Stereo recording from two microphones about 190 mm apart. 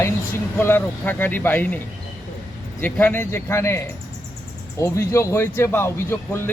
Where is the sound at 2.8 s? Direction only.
10° left (ahead or behind).